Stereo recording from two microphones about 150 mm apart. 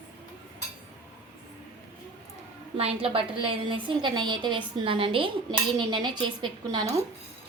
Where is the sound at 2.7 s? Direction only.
40° right (ahead or behind).